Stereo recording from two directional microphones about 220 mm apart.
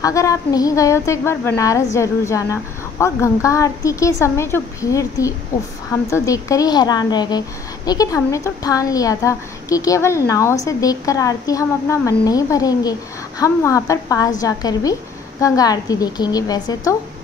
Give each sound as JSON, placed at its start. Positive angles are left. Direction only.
{"t": 0.0, "sound": "a woman's voice", "side_deg": 15}